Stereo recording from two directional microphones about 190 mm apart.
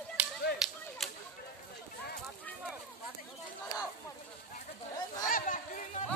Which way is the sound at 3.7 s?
20° left (ahead or behind).